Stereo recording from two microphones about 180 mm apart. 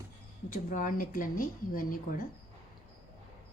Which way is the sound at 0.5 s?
50° left (ahead or behind).